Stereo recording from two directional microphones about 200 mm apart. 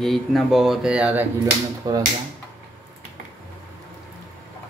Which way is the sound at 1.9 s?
20° right (ahead or behind).